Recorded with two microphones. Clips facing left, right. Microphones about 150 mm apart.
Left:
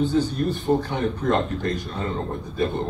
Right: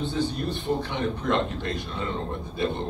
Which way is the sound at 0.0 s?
40° left (ahead or behind).